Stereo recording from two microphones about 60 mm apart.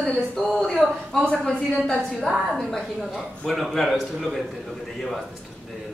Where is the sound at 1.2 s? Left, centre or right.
Centre.